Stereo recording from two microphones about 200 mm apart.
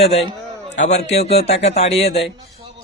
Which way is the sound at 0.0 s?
30° left (ahead or behind).